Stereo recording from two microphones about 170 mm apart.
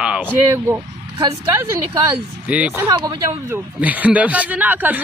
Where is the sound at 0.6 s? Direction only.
15° right (ahead or behind).